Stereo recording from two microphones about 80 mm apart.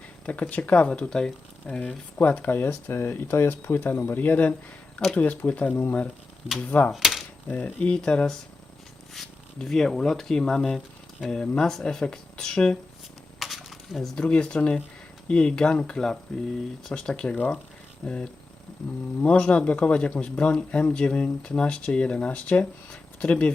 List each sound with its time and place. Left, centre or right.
0.5 s speech: centre
6.9 s typewriter: centre
7.4 s speech: left
13.4 s a sound: centre
14.2 s speech: centre